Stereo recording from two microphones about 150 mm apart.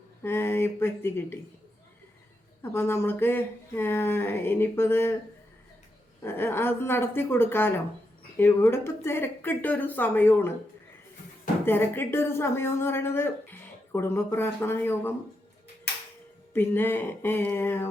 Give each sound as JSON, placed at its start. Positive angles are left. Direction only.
{"t": 0.2, "sound": "speech", "side_deg": 15}
{"t": 2.7, "sound": "speech", "side_deg": 15}
{"t": 6.2, "sound": "speech", "side_deg": 15}
{"t": 11.6, "sound": "speech", "side_deg": 15}
{"t": 16.5, "sound": "speech", "side_deg": 15}